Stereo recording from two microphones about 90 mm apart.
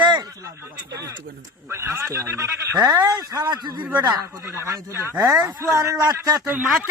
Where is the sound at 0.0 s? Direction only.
55° right (ahead or behind).